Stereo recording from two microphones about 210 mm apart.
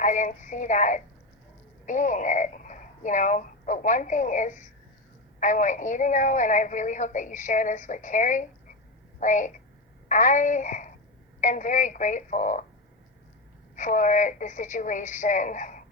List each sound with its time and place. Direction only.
0.0 s a woman's voice: 35° left (ahead or behind)
13.7 s a woman's voice: 35° left (ahead or behind)